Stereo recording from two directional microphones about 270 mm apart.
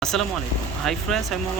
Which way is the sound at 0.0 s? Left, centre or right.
Centre.